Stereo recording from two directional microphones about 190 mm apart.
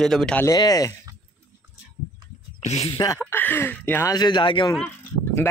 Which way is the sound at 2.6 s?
35° left (ahead or behind).